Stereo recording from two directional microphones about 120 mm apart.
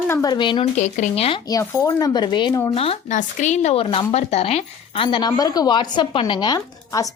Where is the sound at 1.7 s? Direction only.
25° left (ahead or behind).